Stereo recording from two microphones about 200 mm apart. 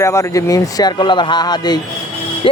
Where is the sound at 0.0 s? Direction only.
15° left (ahead or behind).